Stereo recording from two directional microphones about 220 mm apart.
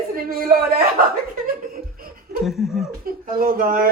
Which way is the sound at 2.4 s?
Centre (ahead or behind).